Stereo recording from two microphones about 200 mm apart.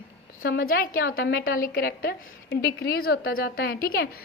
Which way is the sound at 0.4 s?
45° left (ahead or behind).